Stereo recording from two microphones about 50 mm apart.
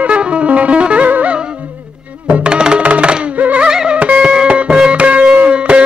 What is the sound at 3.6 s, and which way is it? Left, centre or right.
Music, centre.